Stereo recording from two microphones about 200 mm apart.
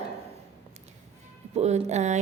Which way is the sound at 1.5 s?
35° right (ahead or behind).